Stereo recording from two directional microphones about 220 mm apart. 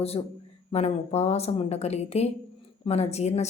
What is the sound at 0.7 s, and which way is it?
A woman's voice, 30° left (ahead or behind).